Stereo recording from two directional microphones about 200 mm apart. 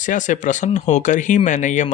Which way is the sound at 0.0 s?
40° left (ahead or behind).